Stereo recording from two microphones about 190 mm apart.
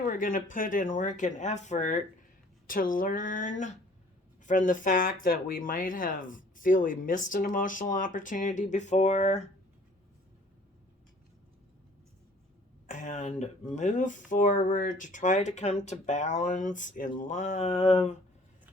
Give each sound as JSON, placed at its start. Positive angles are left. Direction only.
{"t": 0.0, "sound": "speech", "side_deg": 45}
{"t": 12.9, "sound": "a sound", "side_deg": 40}
{"t": 13.7, "sound": "speech", "side_deg": 40}